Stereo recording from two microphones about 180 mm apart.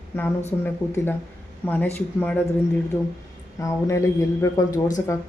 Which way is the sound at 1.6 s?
10° left (ahead or behind).